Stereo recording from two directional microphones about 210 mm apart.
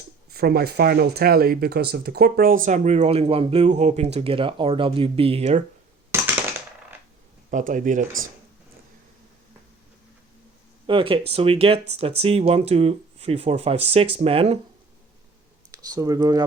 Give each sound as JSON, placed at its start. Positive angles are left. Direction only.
{"t": 0.3, "sound": "speech", "side_deg": -50}
{"t": 6.1, "sound": "a sound", "side_deg": -10}
{"t": 7.5, "sound": "speech", "side_deg": -40}
{"t": 10.8, "sound": "speech", "side_deg": -25}
{"t": 15.7, "sound": "speech", "side_deg": -15}